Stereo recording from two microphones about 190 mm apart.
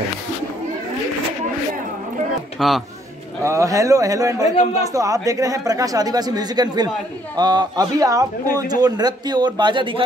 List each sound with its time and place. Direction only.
2.6 s a man's voice: centre (ahead or behind)
3.4 s a man's voice: 15° right (ahead or behind)